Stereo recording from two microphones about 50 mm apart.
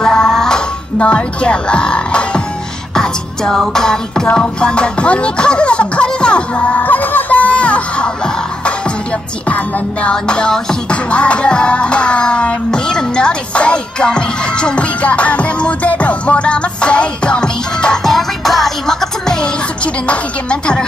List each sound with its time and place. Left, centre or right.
0.0 s music: centre
0.9 s speech: left
2.9 s music: centre
6.8 s music: left
10.1 s music: centre
18.0 s music: centre
19.8 s music: left